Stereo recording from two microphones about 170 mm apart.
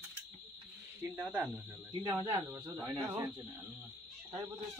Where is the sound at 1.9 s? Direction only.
25° right (ahead or behind).